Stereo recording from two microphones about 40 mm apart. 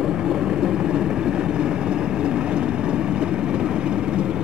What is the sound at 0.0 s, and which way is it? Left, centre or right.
Vehicle, centre.